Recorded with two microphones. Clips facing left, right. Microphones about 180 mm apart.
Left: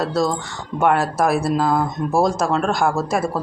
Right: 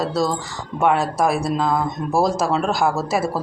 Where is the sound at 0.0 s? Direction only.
Centre (ahead or behind).